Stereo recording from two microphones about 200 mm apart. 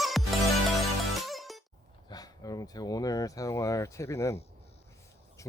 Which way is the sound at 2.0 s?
20° left (ahead or behind).